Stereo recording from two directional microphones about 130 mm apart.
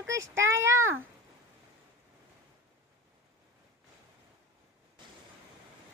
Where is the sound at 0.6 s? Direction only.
20° right (ahead or behind).